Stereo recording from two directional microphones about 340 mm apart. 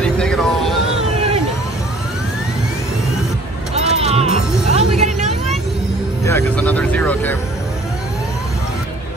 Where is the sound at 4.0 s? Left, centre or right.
Centre.